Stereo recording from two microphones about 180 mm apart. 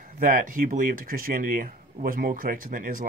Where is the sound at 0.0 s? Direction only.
50° right (ahead or behind).